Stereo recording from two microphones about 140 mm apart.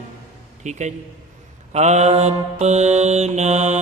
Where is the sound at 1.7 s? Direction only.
55° right (ahead or behind).